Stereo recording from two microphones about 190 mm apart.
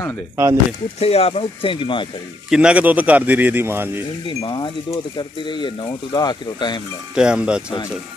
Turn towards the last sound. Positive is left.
turn(degrees=-5)  # may be behind; listen again after turning